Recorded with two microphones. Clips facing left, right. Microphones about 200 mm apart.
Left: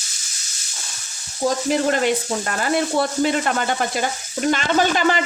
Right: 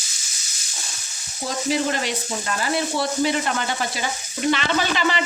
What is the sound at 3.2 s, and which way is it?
Speech, 50° left (ahead or behind).